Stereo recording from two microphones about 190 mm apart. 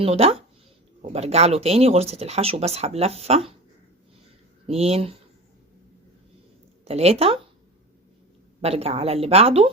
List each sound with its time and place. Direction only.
0.0 s speech: 30° right (ahead or behind)
4.6 s speech: 35° right (ahead or behind)
6.8 s speech: 35° right (ahead or behind)
8.6 s speech: 30° right (ahead or behind)